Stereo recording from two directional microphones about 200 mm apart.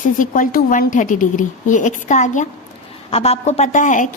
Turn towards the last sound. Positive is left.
turn(degrees=40)  # may be behind; listen again after turning